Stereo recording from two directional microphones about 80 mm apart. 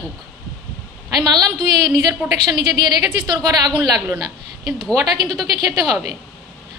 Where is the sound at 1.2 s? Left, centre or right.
Right.